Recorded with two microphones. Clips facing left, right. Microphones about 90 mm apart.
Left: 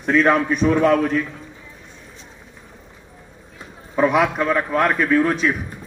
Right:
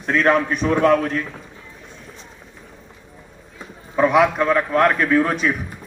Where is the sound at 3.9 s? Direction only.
Centre (ahead or behind).